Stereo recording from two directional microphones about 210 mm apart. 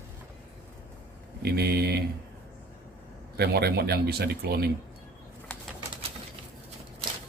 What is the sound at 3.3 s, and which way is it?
Speech, 50° right (ahead or behind).